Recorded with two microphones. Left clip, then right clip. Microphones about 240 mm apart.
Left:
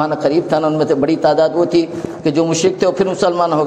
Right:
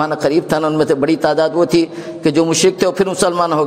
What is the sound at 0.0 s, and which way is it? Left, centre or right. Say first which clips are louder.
A man's voice: even; right.